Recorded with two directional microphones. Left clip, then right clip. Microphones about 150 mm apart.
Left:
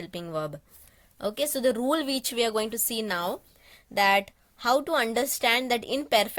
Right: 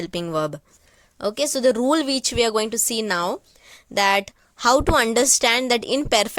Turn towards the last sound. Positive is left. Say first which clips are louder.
# right 5 dB
turn(degrees=-45)  # may be behind; listen again after turning